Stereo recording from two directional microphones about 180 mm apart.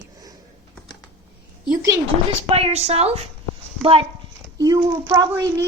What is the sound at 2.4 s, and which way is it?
A woman's voice, 35° right (ahead or behind).